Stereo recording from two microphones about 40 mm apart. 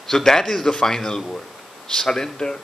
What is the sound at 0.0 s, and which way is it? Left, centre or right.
A man's voice, centre.